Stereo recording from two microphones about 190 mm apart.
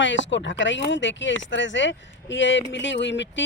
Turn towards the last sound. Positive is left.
turn(degrees=70)  # may be behind; listen again after turning